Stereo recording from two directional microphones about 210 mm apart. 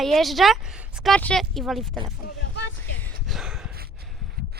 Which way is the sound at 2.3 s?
55° left (ahead or behind).